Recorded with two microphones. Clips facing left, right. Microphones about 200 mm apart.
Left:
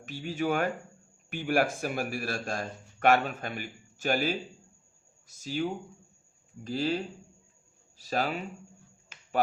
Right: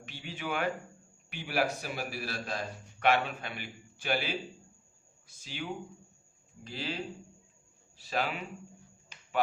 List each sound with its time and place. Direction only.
0.0 s a man's voice: 45° left (ahead or behind)
6.7 s a man's voice: 45° left (ahead or behind)